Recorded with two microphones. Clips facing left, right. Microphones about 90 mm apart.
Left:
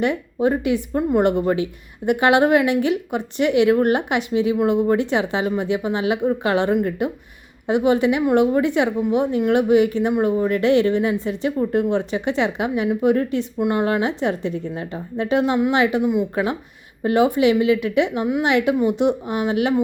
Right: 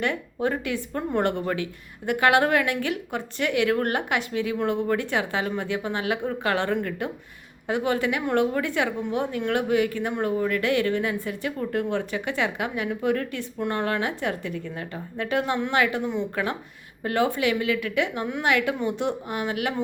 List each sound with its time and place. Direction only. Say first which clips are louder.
0.0 s a woman's voice: left 6 dB; 15° left (ahead or behind)
9.0 s speech: left 7 dB; 10° left (ahead or behind)
9.5 s a woman's voice: left 7 dB; 20° left (ahead or behind)